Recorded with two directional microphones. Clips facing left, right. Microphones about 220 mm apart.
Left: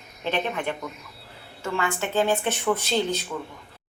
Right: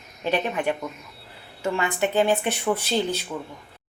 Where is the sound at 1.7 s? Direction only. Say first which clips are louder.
Right 2 dB; 15° right (ahead or behind).